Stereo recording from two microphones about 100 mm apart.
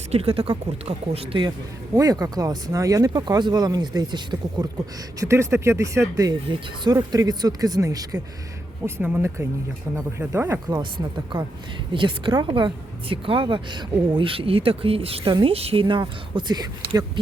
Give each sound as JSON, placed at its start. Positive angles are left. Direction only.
{"t": 0.1, "sound": "speech", "side_deg": -75}
{"t": 2.0, "sound": "speech", "side_deg": -35}
{"t": 5.2, "sound": "speech", "side_deg": -30}
{"t": 8.8, "sound": "speech", "side_deg": -20}
{"t": 10.7, "sound": "a woman's voice", "side_deg": -50}
{"t": 15.5, "sound": "a woman's voice", "side_deg": -75}